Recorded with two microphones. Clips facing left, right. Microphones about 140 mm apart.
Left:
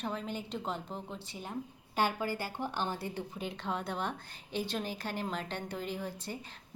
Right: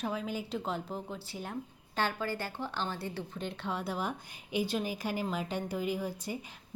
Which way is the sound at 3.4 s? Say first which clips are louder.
Right 1 dB; centre (ahead or behind).